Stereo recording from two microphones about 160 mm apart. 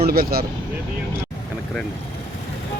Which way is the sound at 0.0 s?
75° right (ahead or behind).